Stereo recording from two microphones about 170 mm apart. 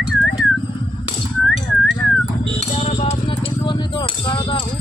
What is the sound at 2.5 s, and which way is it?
Music, 40° left (ahead or behind).